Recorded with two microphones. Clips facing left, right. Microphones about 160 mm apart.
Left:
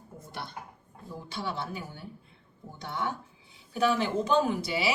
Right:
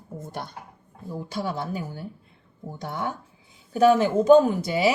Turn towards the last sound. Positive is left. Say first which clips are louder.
# right 7 dB
turn(degrees=-45)  # may be behind; listen again after turning